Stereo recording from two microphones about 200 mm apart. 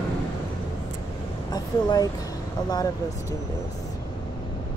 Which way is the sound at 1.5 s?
20° left (ahead or behind).